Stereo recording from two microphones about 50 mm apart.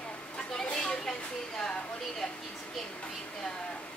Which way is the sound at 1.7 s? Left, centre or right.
Left.